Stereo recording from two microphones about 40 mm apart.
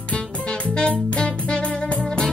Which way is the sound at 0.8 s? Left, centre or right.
Left.